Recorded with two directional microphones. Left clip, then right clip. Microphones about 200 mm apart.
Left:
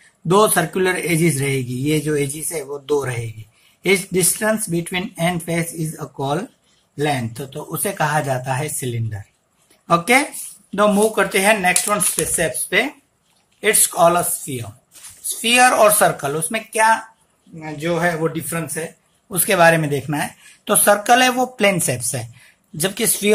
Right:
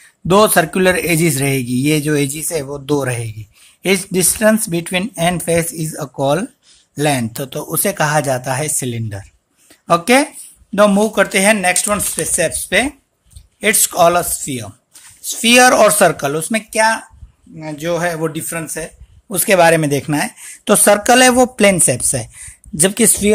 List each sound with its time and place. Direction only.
0.3 s a man's voice: 50° right (ahead or behind); by 23.3 s 30° right (ahead or behind)